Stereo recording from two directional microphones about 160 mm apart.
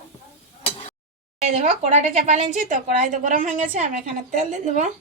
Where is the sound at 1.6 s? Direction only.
50° right (ahead or behind).